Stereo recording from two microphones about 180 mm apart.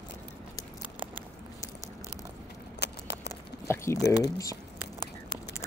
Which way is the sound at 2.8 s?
70° left (ahead or behind).